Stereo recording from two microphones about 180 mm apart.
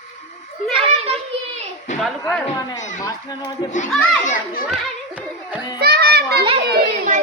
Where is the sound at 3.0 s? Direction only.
25° left (ahead or behind).